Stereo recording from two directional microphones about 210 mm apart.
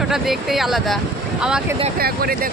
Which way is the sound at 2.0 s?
45° right (ahead or behind).